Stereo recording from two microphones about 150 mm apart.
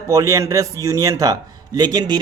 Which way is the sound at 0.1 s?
20° right (ahead or behind).